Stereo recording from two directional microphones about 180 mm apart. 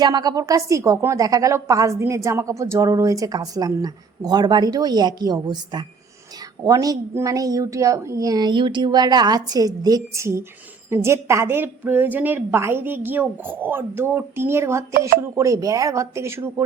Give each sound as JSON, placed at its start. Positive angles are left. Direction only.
{"t": 0.0, "sound": "a woman's voice", "side_deg": -20}